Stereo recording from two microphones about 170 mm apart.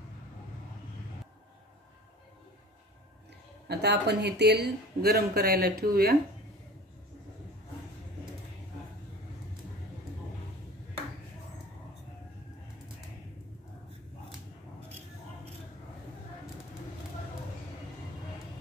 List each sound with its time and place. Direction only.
3.6 s speech: 75° right (ahead or behind)